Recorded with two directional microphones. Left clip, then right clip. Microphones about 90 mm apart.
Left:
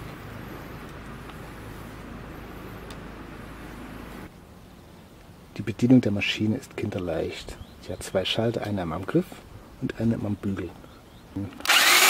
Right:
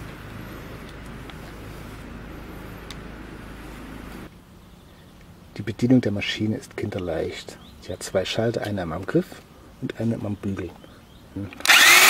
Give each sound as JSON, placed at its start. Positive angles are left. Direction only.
{"t": 5.5, "sound": "speech", "side_deg": 35}
{"t": 9.8, "sound": "speech", "side_deg": 35}
{"t": 11.6, "sound": "drill", "side_deg": 0}